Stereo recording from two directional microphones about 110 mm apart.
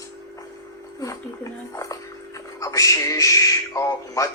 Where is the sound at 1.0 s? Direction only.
30° left (ahead or behind).